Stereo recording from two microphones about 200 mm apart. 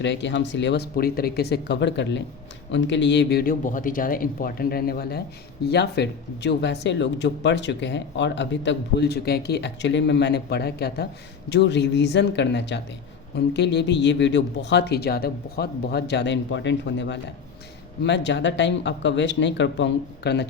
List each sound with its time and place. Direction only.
0.0 s speech: 60° left (ahead or behind)